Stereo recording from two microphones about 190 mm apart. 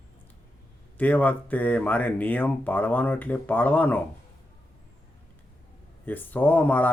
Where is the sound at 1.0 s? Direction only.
10° left (ahead or behind).